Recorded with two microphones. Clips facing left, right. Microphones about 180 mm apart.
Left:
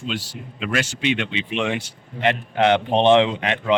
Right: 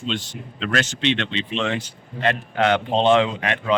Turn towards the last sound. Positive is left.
turn(degrees=20)  # may be behind; listen again after turning